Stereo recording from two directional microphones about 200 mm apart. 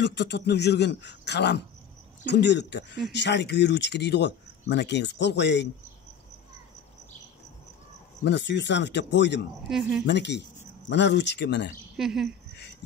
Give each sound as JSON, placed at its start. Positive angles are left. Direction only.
{"t": 0.0, "sound": "speech", "side_deg": 60}
{"t": 8.2, "sound": "speech", "side_deg": 60}
{"t": 9.7, "sound": "speech", "side_deg": 0}
{"t": 10.0, "sound": "speech", "side_deg": 60}
{"t": 12.0, "sound": "speech", "side_deg": 0}